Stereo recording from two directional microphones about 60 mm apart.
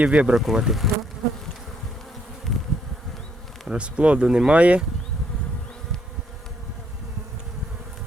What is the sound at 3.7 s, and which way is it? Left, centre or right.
Speech, centre.